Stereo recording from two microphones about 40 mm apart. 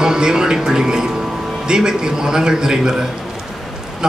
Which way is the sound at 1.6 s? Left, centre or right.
Centre.